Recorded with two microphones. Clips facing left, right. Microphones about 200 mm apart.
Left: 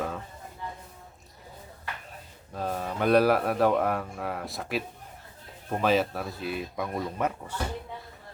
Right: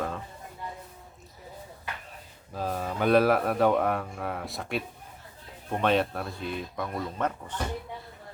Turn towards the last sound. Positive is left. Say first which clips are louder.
# left 1 dB
turn(degrees=10)  # may be behind; listen again after turning